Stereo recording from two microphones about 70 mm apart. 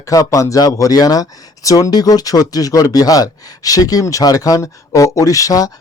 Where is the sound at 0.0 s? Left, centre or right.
Left.